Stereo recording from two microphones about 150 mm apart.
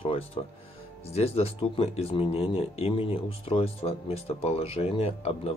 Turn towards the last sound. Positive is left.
turn(degrees=40)  # may be behind; listen again after turning